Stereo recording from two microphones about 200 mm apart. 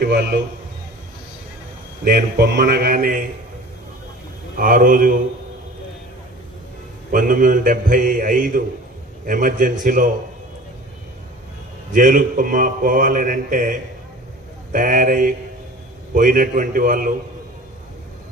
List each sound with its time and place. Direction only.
0.0 s mantra: 55° right (ahead or behind)
2.0 s mantra: 55° right (ahead or behind)
4.5 s mantra: 45° right (ahead or behind)
7.1 s mantra: 45° right (ahead or behind)
11.9 s mantra: 45° right (ahead or behind)